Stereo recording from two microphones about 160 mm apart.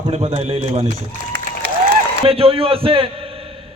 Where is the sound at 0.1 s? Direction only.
40° right (ahead or behind).